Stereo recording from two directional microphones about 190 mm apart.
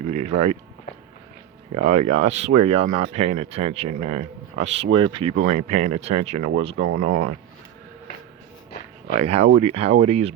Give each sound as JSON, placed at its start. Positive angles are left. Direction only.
{"t": 0.0, "sound": "a sound", "side_deg": -35}
{"t": 1.7, "sound": "speech", "side_deg": -35}
{"t": 5.5, "sound": "speech", "side_deg": -40}
{"t": 9.1, "sound": "speech", "side_deg": -35}